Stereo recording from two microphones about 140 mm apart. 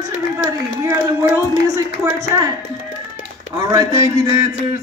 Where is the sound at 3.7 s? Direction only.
25° right (ahead or behind).